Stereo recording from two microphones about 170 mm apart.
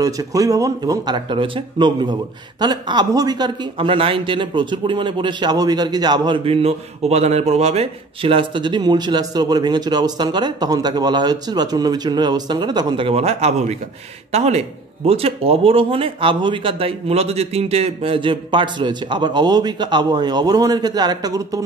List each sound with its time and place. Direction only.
0.0 s speech: 20° right (ahead or behind)